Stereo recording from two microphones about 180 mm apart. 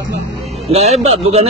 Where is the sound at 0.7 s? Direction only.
35° right (ahead or behind).